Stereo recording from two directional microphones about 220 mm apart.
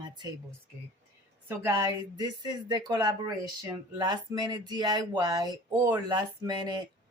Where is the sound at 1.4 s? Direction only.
10° right (ahead or behind).